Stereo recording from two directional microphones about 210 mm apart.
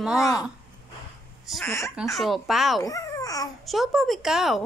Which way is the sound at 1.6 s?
10° left (ahead or behind).